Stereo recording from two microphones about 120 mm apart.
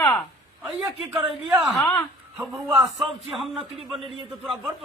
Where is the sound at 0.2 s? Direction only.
Centre (ahead or behind).